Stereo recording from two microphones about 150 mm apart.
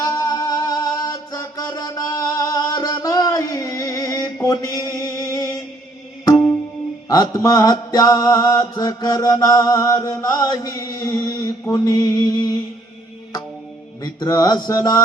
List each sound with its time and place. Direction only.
0.0 s music: 25° left (ahead or behind)
6.3 s music: 10° left (ahead or behind)
7.1 s mantra: 25° left (ahead or behind)
14.0 s mantra: 25° left (ahead or behind)